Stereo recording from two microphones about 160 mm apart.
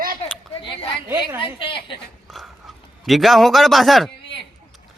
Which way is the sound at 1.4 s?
30° left (ahead or behind).